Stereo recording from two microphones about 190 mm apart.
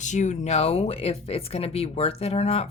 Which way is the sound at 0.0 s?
40° left (ahead or behind).